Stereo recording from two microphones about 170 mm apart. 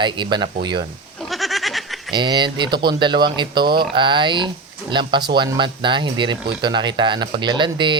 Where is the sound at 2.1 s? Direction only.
25° right (ahead or behind).